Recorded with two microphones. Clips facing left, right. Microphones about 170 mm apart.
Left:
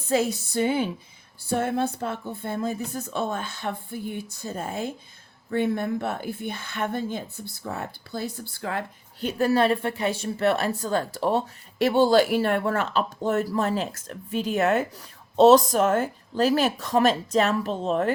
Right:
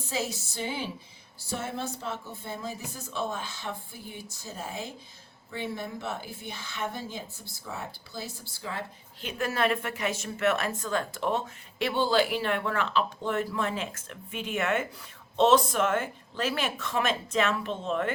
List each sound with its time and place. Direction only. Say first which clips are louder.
0.1 s speech: left 10 dB; 55° left (ahead or behind)
9.2 s speech: left 7 dB; 35° left (ahead or behind)